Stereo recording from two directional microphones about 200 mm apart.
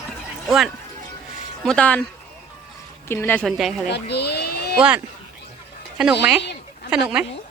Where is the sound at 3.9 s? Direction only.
55° left (ahead or behind).